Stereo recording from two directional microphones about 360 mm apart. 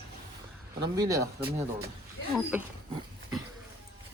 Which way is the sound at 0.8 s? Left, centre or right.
Centre.